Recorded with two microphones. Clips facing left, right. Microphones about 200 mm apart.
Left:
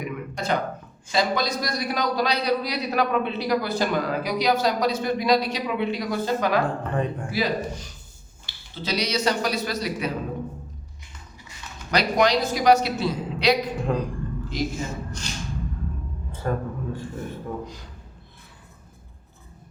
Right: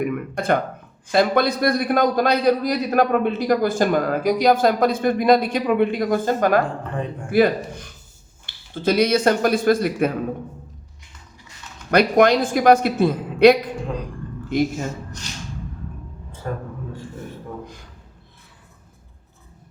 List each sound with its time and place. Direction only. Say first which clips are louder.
0.0 s a sound: right 6 dB; 55° right (ahead or behind)
1.1 s a man's voice: right 6 dB; 55° right (ahead or behind)
11.9 s a man's voice: right 6 dB; 55° right (ahead or behind)
16.4 s a man's voice: left 2 dB; 55° left (ahead or behind)